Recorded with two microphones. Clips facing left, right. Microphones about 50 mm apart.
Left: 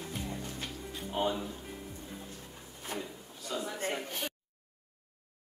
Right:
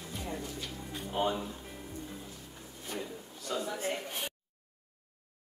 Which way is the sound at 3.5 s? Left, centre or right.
Centre.